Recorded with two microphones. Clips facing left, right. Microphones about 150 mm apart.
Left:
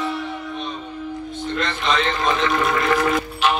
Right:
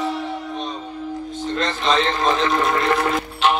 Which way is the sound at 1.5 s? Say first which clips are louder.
Right 2 dB; 35° right (ahead or behind).